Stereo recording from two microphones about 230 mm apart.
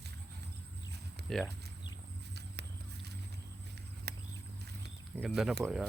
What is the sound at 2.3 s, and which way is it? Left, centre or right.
Horse, right.